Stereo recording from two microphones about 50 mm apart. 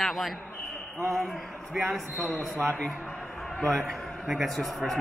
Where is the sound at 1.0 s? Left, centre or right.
Right.